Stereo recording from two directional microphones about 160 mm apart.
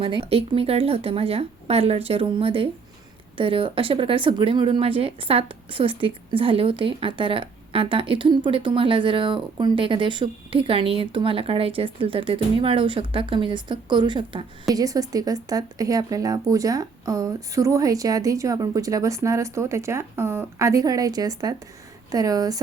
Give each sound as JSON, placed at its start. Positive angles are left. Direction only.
{"t": 0.0, "sound": "speech", "side_deg": -35}